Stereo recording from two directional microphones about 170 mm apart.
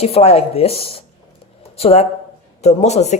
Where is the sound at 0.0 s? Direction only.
35° left (ahead or behind).